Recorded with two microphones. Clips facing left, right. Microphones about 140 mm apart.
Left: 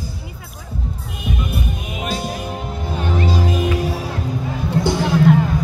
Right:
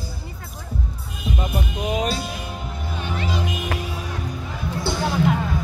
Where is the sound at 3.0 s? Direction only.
35° left (ahead or behind).